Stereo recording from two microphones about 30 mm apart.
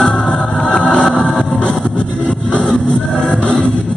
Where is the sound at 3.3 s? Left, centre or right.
Left.